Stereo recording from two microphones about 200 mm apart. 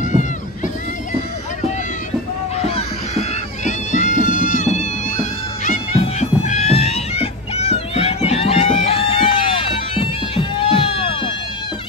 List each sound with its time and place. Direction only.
0.0 s a sound: 40° left (ahead or behind)
2.6 s cat: 30° left (ahead or behind)
5.7 s music: 35° left (ahead or behind)